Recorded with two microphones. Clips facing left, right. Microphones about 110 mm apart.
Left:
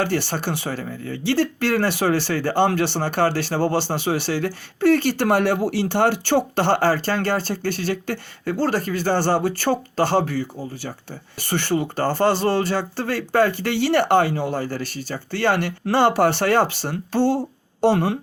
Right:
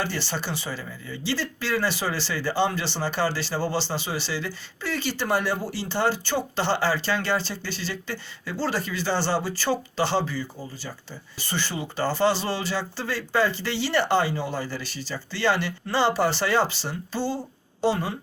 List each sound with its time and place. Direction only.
0.0 s speech: 55° left (ahead or behind)